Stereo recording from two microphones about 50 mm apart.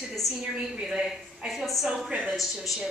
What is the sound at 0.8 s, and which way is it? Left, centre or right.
A woman's voice, centre.